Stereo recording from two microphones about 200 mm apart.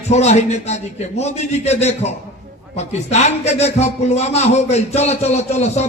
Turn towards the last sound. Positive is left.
turn(degrees=35)  # may be behind; listen again after turning